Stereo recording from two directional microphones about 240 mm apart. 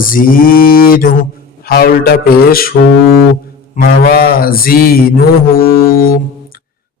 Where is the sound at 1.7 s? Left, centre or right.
Left.